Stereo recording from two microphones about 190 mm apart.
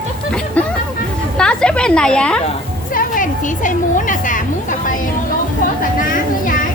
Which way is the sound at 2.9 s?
45° left (ahead or behind).